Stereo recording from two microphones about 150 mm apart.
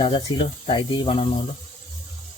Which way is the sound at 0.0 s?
35° left (ahead or behind).